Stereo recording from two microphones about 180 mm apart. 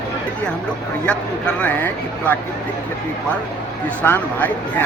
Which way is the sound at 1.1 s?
5° left (ahead or behind).